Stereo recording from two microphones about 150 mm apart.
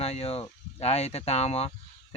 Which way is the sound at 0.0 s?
45° left (ahead or behind).